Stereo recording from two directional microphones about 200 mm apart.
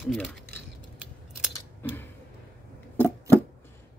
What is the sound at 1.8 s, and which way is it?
Tick-tock, 10° left (ahead or behind).